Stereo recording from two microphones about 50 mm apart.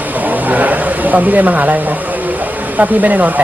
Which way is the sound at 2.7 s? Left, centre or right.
Right.